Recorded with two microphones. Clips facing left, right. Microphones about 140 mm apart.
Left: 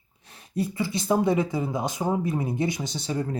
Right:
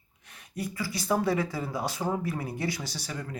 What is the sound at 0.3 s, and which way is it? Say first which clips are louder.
Speech: left 7 dB; 30° left (ahead or behind).